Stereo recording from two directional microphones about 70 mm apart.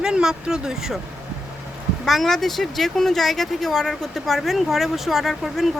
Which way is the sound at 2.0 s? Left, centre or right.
Centre.